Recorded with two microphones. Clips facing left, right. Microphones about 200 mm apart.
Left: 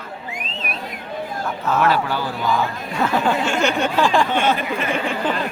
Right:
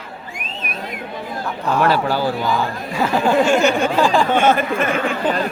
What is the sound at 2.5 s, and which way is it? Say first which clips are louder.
Speech: right 1 dB; 5° right (ahead or behind).